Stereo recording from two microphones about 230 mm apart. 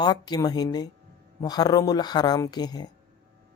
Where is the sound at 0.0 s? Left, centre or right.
Centre.